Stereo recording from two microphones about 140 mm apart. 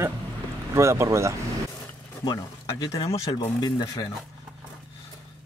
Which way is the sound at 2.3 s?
30° left (ahead or behind).